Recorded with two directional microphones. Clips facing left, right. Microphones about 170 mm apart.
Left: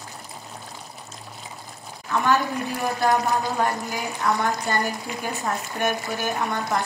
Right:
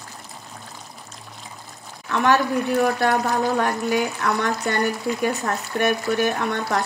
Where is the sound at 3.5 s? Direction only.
70° right (ahead or behind).